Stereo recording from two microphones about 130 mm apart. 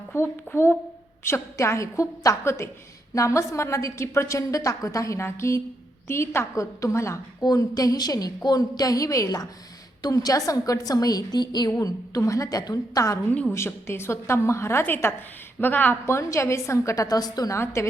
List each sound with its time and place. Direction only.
0.1 s a woman's voice: 20° left (ahead or behind)